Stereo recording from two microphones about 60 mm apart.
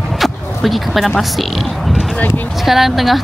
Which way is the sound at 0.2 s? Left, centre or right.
Centre.